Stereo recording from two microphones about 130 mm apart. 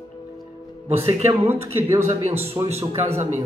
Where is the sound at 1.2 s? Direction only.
20° right (ahead or behind).